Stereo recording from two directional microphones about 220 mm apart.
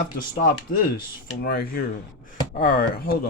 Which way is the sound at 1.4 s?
45° left (ahead or behind).